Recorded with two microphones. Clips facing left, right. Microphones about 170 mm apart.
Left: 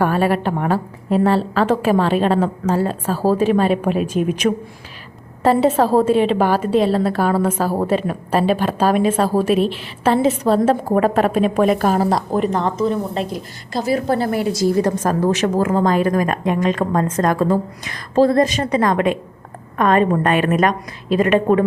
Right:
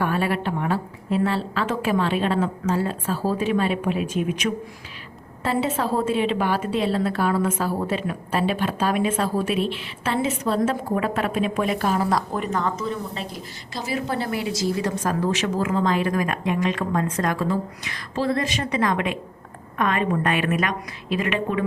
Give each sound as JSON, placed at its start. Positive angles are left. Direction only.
{"t": 0.0, "sound": "a woman's voice", "side_deg": 40}
{"t": 12.0, "sound": "a woman's voice", "side_deg": 35}